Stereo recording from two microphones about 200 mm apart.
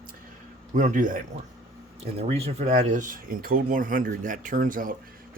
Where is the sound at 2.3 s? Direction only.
30° right (ahead or behind).